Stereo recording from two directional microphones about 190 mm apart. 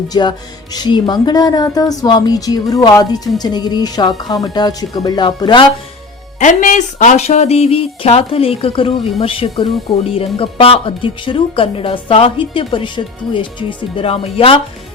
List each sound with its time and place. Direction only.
0.1 s speech: 20° left (ahead or behind)
6.4 s speech: 40° left (ahead or behind)